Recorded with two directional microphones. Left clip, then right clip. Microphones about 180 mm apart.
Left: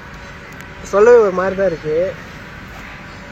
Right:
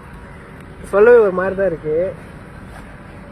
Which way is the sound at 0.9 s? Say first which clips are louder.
Left 1 dB; 20° right (ahead or behind).